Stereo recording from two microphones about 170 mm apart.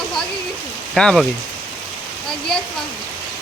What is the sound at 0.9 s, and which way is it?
Speech, 5° left (ahead or behind).